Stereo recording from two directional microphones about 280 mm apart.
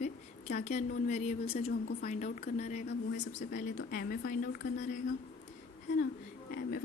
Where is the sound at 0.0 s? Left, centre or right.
Left.